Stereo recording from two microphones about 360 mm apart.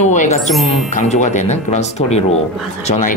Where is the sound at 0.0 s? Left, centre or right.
Centre.